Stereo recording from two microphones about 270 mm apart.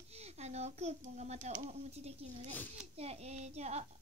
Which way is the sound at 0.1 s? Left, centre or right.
Right.